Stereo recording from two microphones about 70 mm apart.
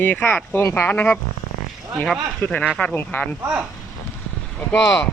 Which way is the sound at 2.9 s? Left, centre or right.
Left.